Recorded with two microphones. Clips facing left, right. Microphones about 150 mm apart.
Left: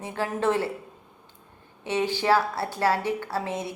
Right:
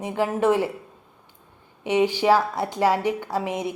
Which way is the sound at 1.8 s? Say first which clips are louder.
Right 5 dB; 15° right (ahead or behind).